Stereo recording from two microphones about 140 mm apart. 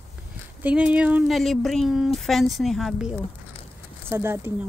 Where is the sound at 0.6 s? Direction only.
10° right (ahead or behind).